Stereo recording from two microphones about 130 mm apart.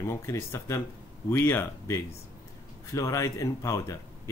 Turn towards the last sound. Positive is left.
turn(degrees=25)  # may be behind; listen again after turning